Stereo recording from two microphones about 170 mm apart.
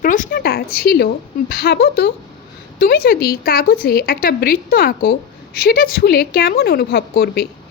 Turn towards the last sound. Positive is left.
turn(degrees=60)  # may be behind; listen again after turning